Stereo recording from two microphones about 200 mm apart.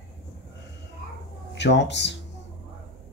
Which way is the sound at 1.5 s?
60° left (ahead or behind).